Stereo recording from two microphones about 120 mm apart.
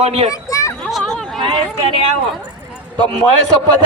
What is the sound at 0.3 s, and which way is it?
Children playing, 25° left (ahead or behind).